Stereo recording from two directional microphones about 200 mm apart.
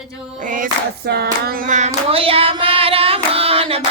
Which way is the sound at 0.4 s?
40° right (ahead or behind).